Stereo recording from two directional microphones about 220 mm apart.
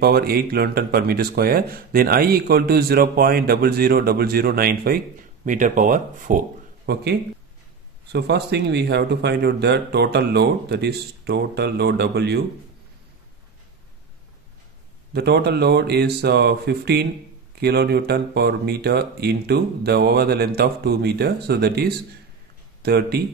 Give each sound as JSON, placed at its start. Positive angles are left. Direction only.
{"t": 0.0, "sound": "speech", "side_deg": -45}
{"t": 8.1, "sound": "speech", "side_deg": -50}
{"t": 15.1, "sound": "speech", "side_deg": -45}